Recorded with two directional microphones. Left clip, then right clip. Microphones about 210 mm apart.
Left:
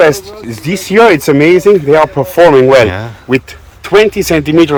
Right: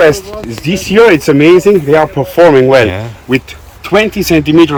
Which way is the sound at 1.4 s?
90° left.